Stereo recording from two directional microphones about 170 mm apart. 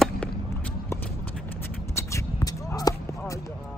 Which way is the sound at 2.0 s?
15° left (ahead or behind).